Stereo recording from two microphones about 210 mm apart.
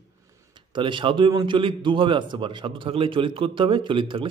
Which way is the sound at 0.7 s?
20° right (ahead or behind).